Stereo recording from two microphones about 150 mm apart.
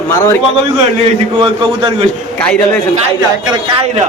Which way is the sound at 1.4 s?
35° right (ahead or behind).